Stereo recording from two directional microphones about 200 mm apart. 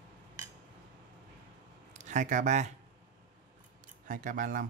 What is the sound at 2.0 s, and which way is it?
Speech, 40° right (ahead or behind).